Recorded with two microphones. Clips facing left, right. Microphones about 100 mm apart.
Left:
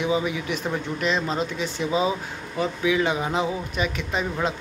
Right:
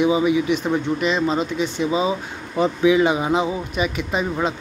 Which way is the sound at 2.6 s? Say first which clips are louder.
Right 6 dB; 20° right (ahead or behind).